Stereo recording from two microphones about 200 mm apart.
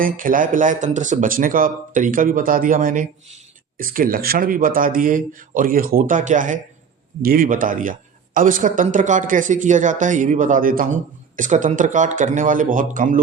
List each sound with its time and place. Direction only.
0.0 s speech: 45° right (ahead or behind)